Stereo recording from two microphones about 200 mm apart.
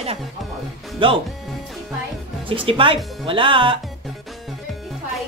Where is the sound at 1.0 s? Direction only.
25° right (ahead or behind).